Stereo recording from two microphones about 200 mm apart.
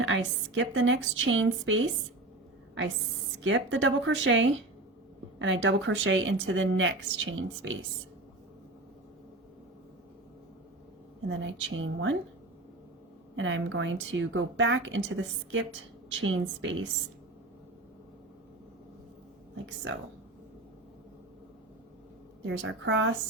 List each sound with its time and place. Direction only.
0.0 s speech: 65° right (ahead or behind)
3.3 s speech: 65° right (ahead or behind)
11.3 s speech: 70° right (ahead or behind)
13.3 s speech: 70° right (ahead or behind)
22.4 s a woman's voice: 65° right (ahead or behind)